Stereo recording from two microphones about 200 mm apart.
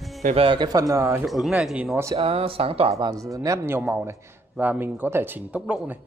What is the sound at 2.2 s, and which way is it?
Speech, 30° right (ahead or behind).